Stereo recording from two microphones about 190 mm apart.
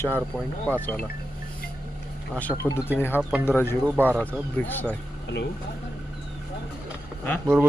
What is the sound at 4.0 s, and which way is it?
Speech, 5° right (ahead or behind).